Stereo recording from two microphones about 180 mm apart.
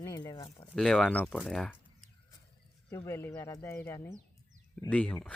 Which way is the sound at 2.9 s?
15° left (ahead or behind).